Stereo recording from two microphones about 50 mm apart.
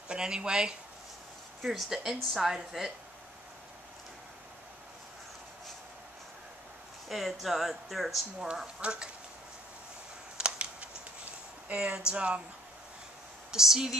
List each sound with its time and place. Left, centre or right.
0.1 s a woman's voice: centre
1.6 s a woman's voice: centre
7.1 s speech: centre
8.8 s speech: right
10.3 s a sound: right
11.7 s speech: centre
13.5 s a woman's voice: centre